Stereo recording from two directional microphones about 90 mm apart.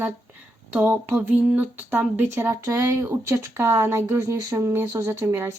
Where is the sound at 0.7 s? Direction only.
25° right (ahead or behind).